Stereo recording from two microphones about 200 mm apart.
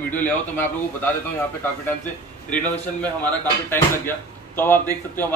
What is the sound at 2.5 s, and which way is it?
Speech, 5° left (ahead or behind).